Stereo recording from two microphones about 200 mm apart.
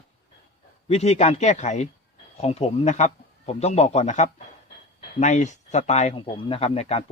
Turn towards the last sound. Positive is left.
turn(degrees=30)  # may be behind; listen again after turning